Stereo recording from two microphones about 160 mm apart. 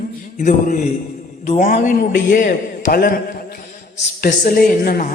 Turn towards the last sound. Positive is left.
turn(degrees=65)  # may be behind; listen again after turning